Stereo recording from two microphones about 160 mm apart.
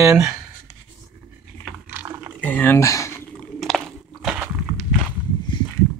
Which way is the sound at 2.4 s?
10° left (ahead or behind).